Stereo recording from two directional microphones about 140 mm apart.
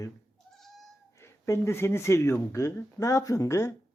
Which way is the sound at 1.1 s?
20° left (ahead or behind).